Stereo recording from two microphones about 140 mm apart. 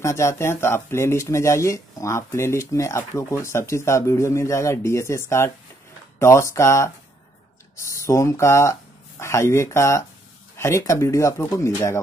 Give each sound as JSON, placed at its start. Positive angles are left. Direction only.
{"t": 0.0, "sound": "speech", "side_deg": 20}